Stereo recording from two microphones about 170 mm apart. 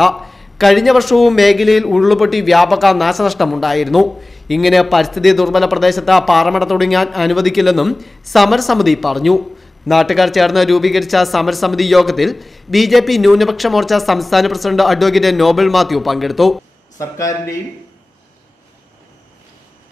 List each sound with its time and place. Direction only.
0.0 s a man's voice: centre (ahead or behind)
17.0 s speech: 20° left (ahead or behind)